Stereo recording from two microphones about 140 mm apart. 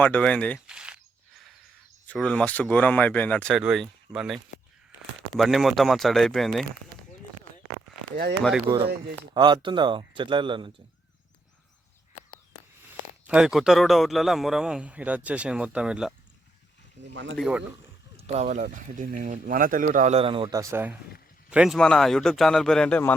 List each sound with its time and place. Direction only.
0.0 s speech: 10° left (ahead or behind)
0.7 s a sound: 5° right (ahead or behind)
2.1 s speech: 10° left (ahead or behind)
3.6 s a man's voice: 5° right (ahead or behind)
8.6 s speech: 30° right (ahead or behind)
13.2 s a man's voice: 5° right (ahead or behind)
17.4 s speech: 10° left (ahead or behind)
18.2 s speech: 50° right (ahead or behind); by 20.1 s 70° right (ahead or behind)
20.1 s speech: 40° right (ahead or behind)
20.5 s speech: 25° right (ahead or behind)
21.5 s a man's voice: 5° right (ahead or behind)